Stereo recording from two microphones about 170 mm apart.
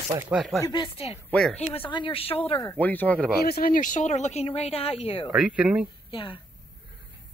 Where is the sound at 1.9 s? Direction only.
30° left (ahead or behind).